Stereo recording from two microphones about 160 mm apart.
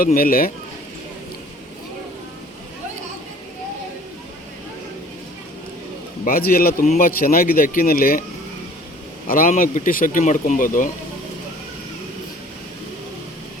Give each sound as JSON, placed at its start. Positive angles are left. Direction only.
{"t": 0.0, "sound": "speech", "side_deg": 65}
{"t": 6.2, "sound": "speech", "side_deg": 65}
{"t": 9.2, "sound": "speech", "side_deg": 60}